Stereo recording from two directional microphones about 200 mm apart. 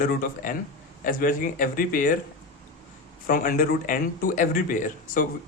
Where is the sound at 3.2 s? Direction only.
45° left (ahead or behind).